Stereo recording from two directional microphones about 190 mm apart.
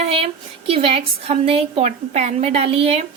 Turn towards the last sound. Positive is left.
turn(degrees=-30)  # may be behind; listen again after turning